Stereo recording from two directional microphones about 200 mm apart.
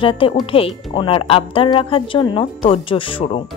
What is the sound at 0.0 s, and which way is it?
A woman's voice, 25° left (ahead or behind).